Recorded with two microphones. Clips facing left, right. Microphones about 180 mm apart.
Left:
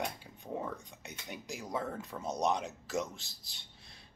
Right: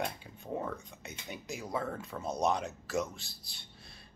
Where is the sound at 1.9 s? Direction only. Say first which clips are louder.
Right 1 dB; centre (ahead or behind).